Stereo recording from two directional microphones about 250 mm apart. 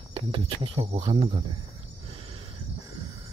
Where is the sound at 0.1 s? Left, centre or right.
Right.